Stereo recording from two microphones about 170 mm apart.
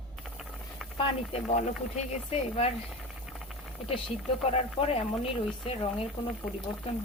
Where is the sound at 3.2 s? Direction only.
Centre (ahead or behind).